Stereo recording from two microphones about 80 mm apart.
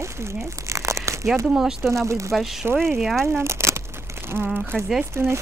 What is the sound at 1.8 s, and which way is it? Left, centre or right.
Speech, right.